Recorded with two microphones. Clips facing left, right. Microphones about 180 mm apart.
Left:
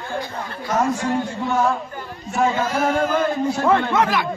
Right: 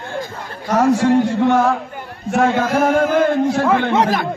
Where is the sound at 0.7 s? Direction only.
75° right (ahead or behind).